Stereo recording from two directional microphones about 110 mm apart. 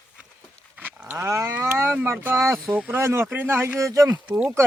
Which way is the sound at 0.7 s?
15° right (ahead or behind).